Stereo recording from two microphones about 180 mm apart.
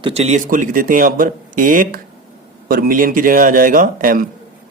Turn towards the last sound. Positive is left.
turn(degrees=-50)  # may be behind; listen again after turning